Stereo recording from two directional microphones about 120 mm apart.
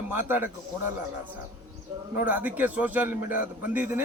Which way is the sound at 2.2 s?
15° right (ahead or behind).